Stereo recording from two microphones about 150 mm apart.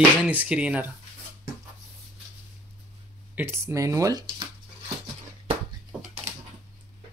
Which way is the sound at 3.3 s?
15° right (ahead or behind).